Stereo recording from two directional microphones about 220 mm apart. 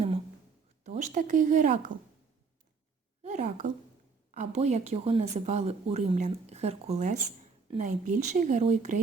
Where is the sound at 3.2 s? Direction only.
30° right (ahead or behind).